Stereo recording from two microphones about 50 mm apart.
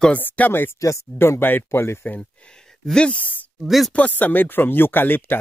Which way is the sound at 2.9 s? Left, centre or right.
Centre.